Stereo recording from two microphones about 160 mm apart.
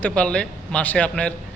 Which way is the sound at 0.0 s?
5° left (ahead or behind).